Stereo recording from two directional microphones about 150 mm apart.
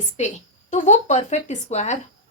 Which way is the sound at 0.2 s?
50° left (ahead or behind).